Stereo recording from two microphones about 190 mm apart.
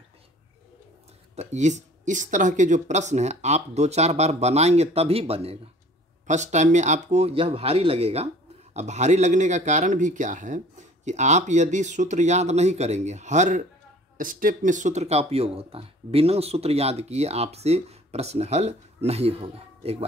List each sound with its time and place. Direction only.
1.3 s speech: 35° right (ahead or behind)